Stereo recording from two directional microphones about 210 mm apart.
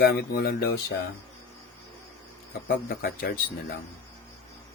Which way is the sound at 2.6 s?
45° left (ahead or behind).